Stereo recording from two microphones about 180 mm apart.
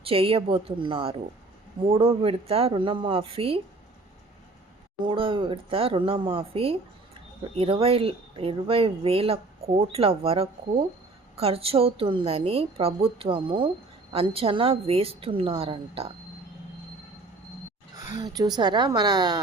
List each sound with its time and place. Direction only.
0.0 s speech: 30° right (ahead or behind)
5.0 s speech: 30° right (ahead or behind)
17.9 s speech: 20° right (ahead or behind)